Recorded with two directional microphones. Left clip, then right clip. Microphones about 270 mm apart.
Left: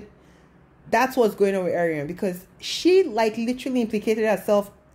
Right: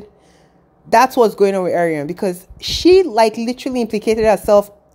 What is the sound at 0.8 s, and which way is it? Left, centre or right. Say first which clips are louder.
A woman's voice: right 8 dB; right.